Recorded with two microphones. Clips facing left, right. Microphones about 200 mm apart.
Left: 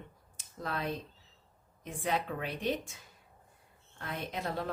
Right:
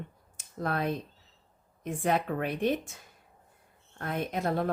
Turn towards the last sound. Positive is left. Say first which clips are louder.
# right 7 dB
turn(degrees=-50)  # may be behind; listen again after turning